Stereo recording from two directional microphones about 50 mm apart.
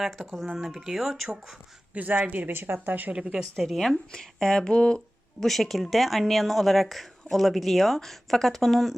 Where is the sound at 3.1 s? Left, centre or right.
Centre.